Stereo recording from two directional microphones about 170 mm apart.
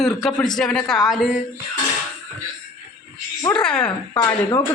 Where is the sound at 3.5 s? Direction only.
5° left (ahead or behind).